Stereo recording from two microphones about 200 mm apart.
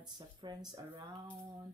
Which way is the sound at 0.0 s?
20° right (ahead or behind).